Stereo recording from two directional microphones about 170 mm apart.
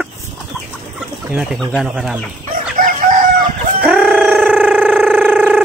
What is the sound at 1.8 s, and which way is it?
Speech, 5° right (ahead or behind).